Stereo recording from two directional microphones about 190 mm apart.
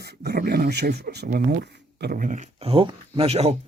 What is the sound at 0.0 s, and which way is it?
Speech, 55° right (ahead or behind).